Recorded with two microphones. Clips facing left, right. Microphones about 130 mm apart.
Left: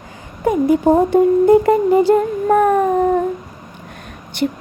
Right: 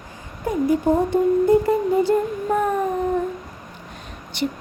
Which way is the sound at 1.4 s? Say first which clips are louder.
Left 6 dB; 90° left.